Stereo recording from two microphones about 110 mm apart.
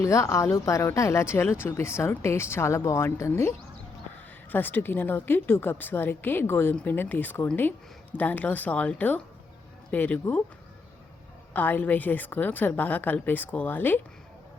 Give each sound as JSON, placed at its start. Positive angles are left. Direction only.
{"t": 0.0, "sound": "speech", "side_deg": 30}
{"t": 4.5, "sound": "a woman's voice", "side_deg": 20}
{"t": 11.5, "sound": "a woman's voice", "side_deg": 15}